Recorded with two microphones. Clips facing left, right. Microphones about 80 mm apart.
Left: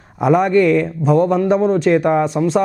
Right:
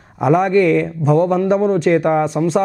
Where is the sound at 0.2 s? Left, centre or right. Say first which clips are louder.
Even; centre.